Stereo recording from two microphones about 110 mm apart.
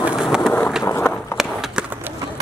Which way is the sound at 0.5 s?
15° left (ahead or behind).